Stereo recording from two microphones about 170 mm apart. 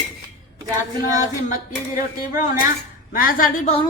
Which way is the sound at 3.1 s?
55° left (ahead or behind).